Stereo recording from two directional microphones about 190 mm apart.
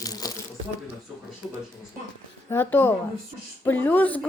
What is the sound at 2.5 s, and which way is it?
Speech, 10° left (ahead or behind).